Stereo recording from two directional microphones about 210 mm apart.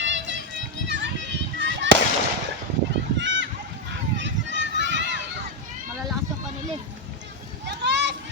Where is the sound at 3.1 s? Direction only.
60° right (ahead or behind).